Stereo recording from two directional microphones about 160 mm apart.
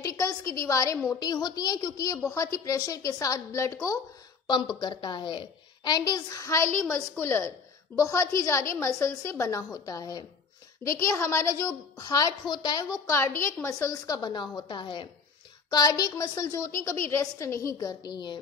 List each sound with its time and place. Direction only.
0.0 s a woman's voice: 20° left (ahead or behind)
4.5 s a woman's voice: 30° left (ahead or behind)